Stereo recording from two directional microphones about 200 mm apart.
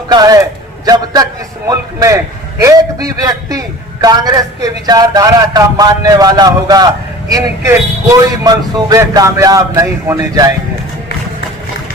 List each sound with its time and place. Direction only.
0.1 s a man's voice: 20° right (ahead or behind)